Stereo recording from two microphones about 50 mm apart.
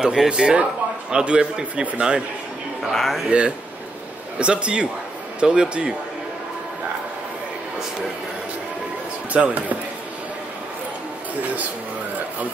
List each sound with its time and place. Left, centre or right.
0.0 s a man's voice: centre
2.9 s speech: centre
3.3 s a man's voice: right
9.3 s speech: right